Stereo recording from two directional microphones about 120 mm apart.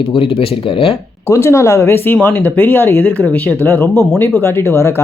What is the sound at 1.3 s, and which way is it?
Speech, 25° left (ahead or behind).